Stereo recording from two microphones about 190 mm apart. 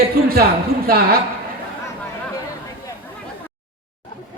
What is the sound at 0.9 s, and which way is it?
Speech, 50° right (ahead or behind).